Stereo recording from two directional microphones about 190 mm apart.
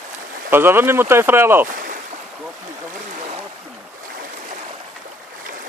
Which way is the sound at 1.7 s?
45° right (ahead or behind).